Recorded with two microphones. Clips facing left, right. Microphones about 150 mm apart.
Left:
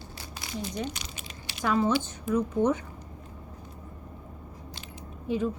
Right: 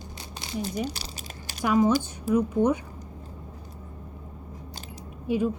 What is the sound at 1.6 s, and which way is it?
A woman's voice, 15° right (ahead or behind).